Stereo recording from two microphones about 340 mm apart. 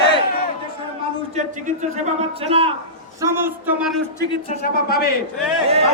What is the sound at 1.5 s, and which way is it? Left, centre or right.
A man's voice, right.